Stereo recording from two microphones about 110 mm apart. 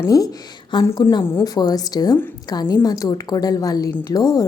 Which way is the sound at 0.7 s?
45° left (ahead or behind).